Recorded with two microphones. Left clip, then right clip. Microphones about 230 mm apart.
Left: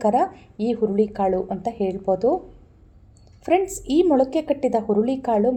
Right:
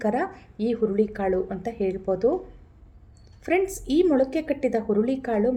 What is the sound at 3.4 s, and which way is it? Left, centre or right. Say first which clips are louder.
A woman's voice: left 3 dB; centre.